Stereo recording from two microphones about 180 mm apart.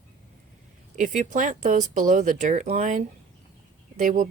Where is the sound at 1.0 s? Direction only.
45° right (ahead or behind).